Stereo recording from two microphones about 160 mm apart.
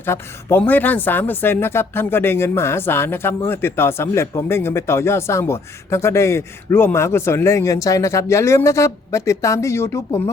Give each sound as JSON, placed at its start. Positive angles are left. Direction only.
{"t": 0.0, "sound": "speech", "side_deg": 15}